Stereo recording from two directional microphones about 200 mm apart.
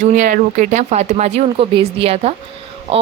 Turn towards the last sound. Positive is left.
turn(degrees=-30)  # may be behind; listen again after turning